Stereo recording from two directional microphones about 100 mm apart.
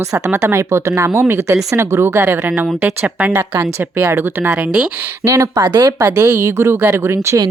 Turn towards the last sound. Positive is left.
turn(degrees=-25)  # may be behind; listen again after turning